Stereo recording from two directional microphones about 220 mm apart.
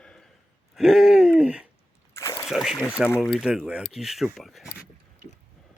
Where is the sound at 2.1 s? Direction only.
15° left (ahead or behind).